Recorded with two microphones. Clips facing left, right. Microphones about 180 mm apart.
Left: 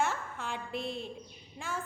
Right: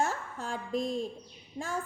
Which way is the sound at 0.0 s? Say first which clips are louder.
Right 1 dB; 40° right (ahead or behind).